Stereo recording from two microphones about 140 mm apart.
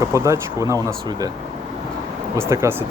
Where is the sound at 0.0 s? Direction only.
20° right (ahead or behind).